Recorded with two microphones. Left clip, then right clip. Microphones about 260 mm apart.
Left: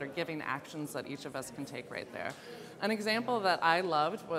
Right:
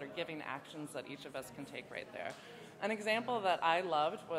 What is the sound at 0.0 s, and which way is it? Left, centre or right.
Speech, left.